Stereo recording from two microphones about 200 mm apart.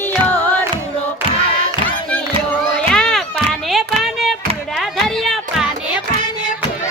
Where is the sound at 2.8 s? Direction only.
5° left (ahead or behind).